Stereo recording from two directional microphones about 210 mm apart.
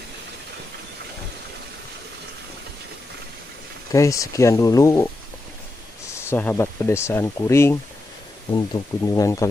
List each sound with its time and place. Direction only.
3.9 s speech: 15° left (ahead or behind)
6.1 s speech: 10° left (ahead or behind)